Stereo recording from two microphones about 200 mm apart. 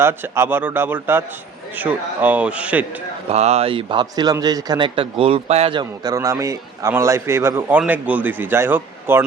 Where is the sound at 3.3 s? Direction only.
30° right (ahead or behind).